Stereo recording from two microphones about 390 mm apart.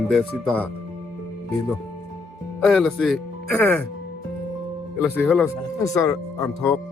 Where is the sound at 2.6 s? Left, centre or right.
Centre.